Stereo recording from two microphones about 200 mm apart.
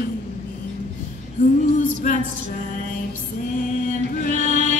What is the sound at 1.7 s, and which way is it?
Music, 40° left (ahead or behind).